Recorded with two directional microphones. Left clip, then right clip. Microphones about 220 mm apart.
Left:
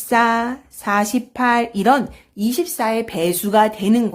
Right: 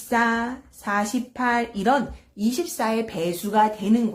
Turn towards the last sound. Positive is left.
turn(degrees=45)  # may be behind; listen again after turning